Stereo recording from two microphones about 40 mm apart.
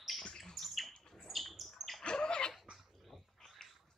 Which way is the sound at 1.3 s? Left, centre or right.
Centre.